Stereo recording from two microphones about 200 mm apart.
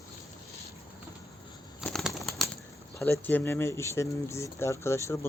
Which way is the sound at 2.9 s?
10° left (ahead or behind).